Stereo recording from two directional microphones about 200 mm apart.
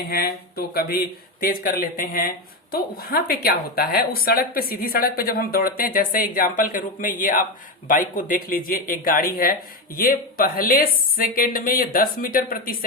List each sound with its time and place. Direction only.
0.1 s speech: 50° left (ahead or behind)